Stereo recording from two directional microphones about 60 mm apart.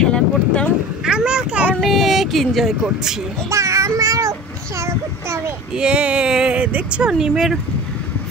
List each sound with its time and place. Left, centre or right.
0.0 s vehicle: centre
1.0 s a sound: centre
1.8 s speech: centre
3.4 s child singing: right
5.8 s speech: centre
7.2 s speech: centre